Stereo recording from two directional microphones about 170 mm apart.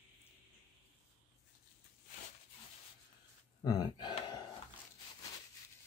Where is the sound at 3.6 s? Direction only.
25° left (ahead or behind).